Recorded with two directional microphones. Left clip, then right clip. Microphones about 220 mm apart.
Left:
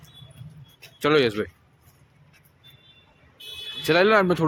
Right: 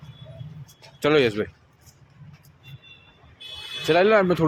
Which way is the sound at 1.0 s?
10° left (ahead or behind).